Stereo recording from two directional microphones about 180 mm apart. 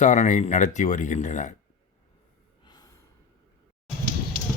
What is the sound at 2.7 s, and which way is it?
Gasp, 20° left (ahead or behind).